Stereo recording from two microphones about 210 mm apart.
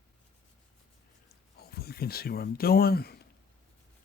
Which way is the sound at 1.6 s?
50° left (ahead or behind).